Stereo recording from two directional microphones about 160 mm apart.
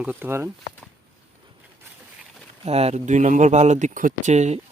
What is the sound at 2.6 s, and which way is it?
Speech, 40° right (ahead or behind).